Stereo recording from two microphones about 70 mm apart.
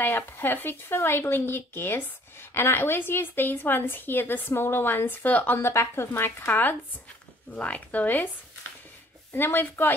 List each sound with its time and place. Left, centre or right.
0.0 s speech: left
5.6 s speech: left
9.3 s speech: left